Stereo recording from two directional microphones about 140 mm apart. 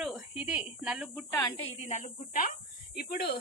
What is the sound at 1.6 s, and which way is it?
Speech, 55° left (ahead or behind).